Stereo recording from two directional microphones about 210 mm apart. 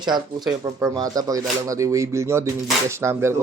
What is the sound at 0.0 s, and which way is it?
Speech, 20° right (ahead or behind).